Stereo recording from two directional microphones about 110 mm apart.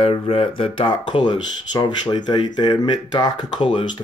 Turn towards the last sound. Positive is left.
turn(degrees=45)  # may be behind; listen again after turning